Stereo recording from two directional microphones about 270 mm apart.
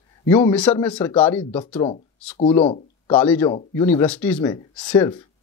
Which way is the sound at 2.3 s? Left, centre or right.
Left.